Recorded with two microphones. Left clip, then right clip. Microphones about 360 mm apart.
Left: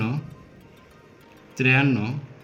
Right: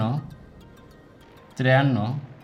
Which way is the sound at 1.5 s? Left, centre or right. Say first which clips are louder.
Even; right.